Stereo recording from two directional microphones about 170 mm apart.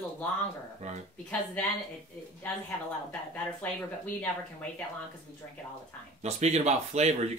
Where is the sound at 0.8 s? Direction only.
40° right (ahead or behind).